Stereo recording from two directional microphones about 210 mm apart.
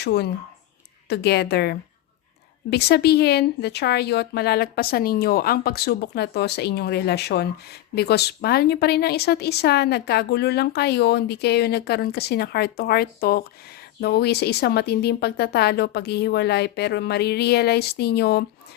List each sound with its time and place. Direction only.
0.0 s a woman's voice: 50° left (ahead or behind)